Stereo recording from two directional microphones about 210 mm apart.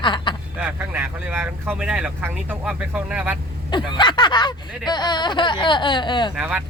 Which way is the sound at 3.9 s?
20° left (ahead or behind).